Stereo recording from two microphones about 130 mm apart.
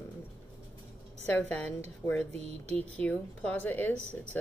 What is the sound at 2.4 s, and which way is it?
Speech, 55° right (ahead or behind).